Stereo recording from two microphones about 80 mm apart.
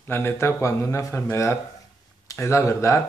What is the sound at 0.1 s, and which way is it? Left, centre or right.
Speech, left.